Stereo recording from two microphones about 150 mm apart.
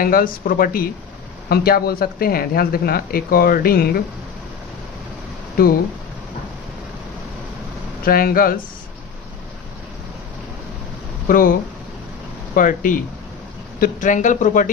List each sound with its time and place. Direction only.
0.0 s speech: 75° left (ahead or behind)
1.5 s speech: 90° left
5.6 s speech: 75° left (ahead or behind)
8.0 s speech: 75° left (ahead or behind)
11.2 s speech: 65° left (ahead or behind)
12.5 s speech: 65° left (ahead or behind)